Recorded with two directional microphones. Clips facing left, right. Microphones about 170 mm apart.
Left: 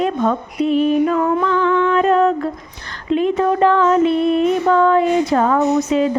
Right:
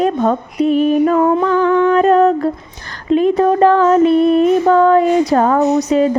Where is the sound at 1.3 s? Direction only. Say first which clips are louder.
Right 3 dB; 40° right (ahead or behind).